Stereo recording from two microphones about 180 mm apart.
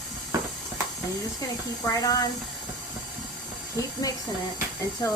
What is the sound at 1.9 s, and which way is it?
Speech, 20° left (ahead or behind).